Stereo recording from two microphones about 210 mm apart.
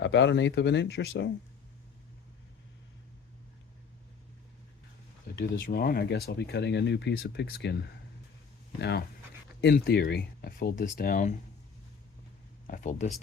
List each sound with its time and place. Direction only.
0.0 s speech: 60° left (ahead or behind)
5.4 s speech: 50° left (ahead or behind)
8.8 s speech: 50° left (ahead or behind)
12.6 s speech: 40° left (ahead or behind)